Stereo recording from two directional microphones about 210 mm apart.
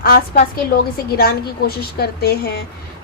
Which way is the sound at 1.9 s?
50° left (ahead or behind).